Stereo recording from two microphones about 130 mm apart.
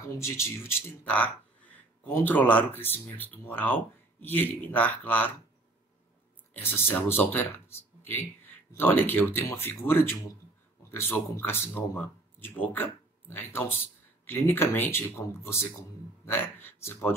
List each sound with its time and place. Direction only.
0.0 s speech: 20° left (ahead or behind)
6.5 s a man's voice: 15° left (ahead or behind)